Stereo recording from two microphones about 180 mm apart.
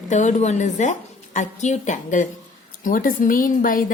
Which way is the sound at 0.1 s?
40° left (ahead or behind).